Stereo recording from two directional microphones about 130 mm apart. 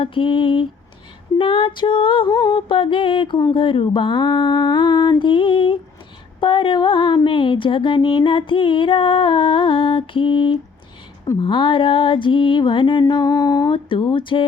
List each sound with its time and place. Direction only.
0.0 s music: 40° left (ahead or behind)